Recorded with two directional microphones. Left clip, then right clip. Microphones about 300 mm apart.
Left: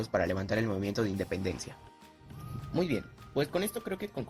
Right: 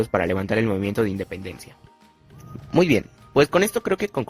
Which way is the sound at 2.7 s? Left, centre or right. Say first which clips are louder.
Right 14 dB; right.